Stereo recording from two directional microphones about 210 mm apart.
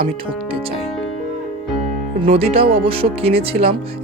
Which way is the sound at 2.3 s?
25° right (ahead or behind).